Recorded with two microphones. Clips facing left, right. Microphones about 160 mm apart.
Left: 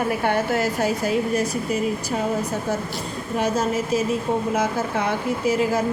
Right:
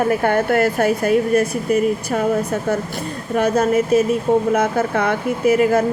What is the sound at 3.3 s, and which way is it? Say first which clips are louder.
Speech: right 6 dB; 55° right (ahead or behind).